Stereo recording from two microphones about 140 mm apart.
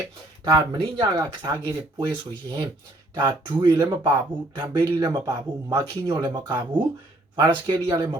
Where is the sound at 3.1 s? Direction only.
35° right (ahead or behind).